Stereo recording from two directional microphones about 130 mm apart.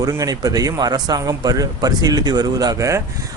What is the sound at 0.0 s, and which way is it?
Speech, 30° right (ahead or behind).